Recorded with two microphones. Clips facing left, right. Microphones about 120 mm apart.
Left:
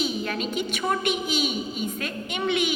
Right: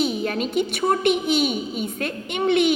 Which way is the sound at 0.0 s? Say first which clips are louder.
Right 4 dB; 55° right (ahead or behind).